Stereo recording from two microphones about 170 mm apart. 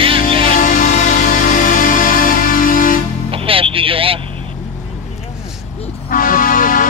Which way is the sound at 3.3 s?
30° right (ahead or behind).